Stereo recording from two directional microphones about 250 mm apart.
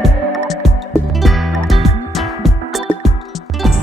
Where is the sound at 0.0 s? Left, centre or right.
Centre.